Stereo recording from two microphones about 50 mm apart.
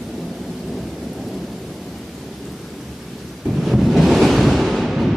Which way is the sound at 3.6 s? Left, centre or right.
Centre.